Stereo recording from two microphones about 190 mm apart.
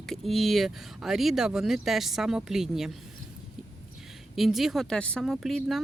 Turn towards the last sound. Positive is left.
turn(degrees=0)  # may be behind; listen again after turning